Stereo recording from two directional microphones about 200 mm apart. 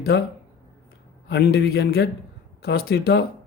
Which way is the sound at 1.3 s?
55° left (ahead or behind).